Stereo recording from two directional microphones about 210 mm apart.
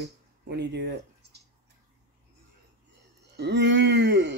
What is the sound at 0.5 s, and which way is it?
Speech, 55° right (ahead or behind).